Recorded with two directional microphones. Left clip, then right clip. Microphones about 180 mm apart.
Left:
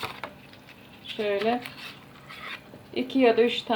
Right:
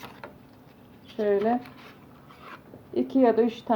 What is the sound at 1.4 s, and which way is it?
Speech, centre (ahead or behind).